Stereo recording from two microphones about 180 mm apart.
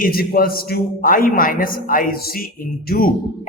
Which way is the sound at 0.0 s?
55° left (ahead or behind).